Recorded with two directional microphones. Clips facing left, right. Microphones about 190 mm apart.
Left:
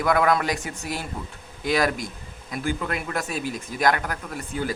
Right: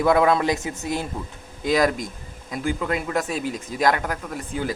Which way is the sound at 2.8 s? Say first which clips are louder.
Right 4 dB; 20° right (ahead or behind).